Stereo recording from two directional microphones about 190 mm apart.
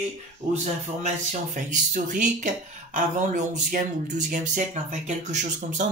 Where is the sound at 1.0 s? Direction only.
40° right (ahead or behind).